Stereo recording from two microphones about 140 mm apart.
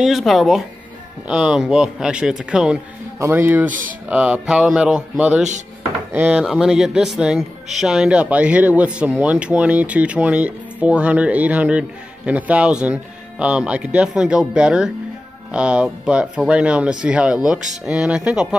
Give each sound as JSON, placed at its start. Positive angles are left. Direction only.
{"t": 0.0, "sound": "speech", "side_deg": 0}